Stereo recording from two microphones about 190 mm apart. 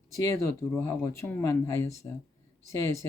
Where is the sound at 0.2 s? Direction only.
15° left (ahead or behind).